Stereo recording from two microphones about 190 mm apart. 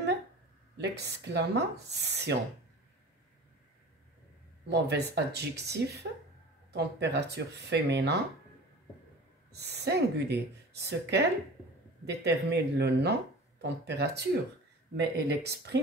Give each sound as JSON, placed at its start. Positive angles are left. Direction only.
{"t": 0.7, "sound": "speech", "side_deg": -60}
{"t": 4.6, "sound": "speech", "side_deg": -65}
{"t": 9.5, "sound": "speech", "side_deg": -60}